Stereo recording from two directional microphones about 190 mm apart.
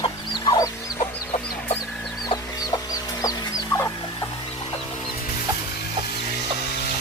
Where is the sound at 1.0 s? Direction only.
35° left (ahead or behind).